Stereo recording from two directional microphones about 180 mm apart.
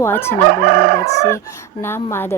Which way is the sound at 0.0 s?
15° left (ahead or behind).